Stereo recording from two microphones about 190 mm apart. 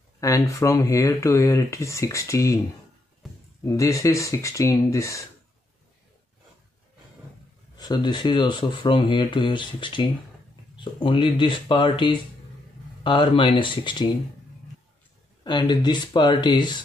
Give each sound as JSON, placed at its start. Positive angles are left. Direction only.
{"t": 0.2, "sound": "speech", "side_deg": 15}
{"t": 3.6, "sound": "speech", "side_deg": 15}
{"t": 7.7, "sound": "speech", "side_deg": 20}
{"t": 15.4, "sound": "speech", "side_deg": 25}